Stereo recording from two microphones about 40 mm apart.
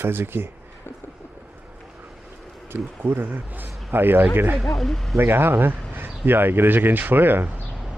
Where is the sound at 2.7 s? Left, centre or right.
Right.